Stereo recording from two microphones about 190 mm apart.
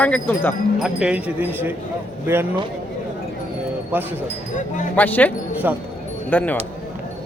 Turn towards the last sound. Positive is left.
turn(degrees=10)  # may be behind; listen again after turning